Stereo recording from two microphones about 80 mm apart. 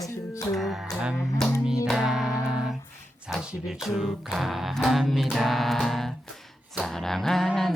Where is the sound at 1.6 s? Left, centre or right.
Centre.